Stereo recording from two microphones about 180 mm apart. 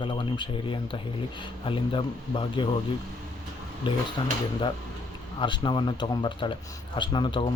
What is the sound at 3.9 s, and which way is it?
Speech, 25° left (ahead or behind).